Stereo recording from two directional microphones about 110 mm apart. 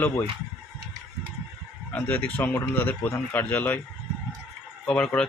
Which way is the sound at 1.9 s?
15° left (ahead or behind).